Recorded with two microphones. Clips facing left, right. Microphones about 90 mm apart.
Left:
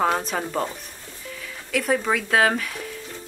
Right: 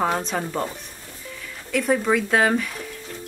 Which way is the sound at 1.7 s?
Centre (ahead or behind).